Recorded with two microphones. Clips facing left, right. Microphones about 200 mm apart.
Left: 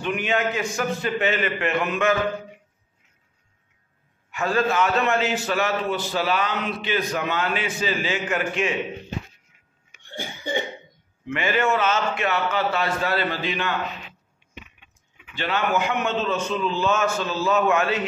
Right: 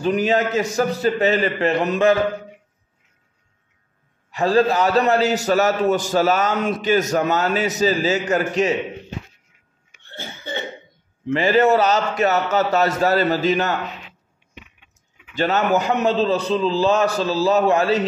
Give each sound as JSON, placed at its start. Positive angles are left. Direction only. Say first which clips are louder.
{"t": 0.0, "sound": "a man's voice", "louder": "right 6 dB", "side_deg": -40}
{"t": 4.3, "sound": "a man's voice", "louder": "right 6 dB", "side_deg": -35}
{"t": 10.0, "sound": "cough", "louder": "left 2 dB", "side_deg": 15}
{"t": 11.2, "sound": "a man's voice", "louder": "right 7 dB", "side_deg": -35}
{"t": 15.3, "sound": "a man's voice", "louder": "right 5 dB", "side_deg": -40}